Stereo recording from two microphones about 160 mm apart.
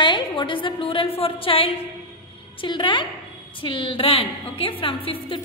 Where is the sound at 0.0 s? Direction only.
30° left (ahead or behind).